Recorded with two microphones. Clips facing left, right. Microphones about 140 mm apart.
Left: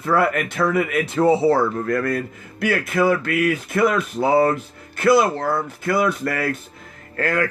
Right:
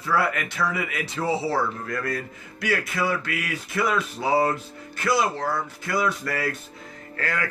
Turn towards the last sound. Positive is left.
turn(degrees=45)  # may be behind; listen again after turning